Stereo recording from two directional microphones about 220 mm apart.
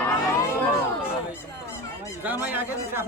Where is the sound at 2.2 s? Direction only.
5° right (ahead or behind).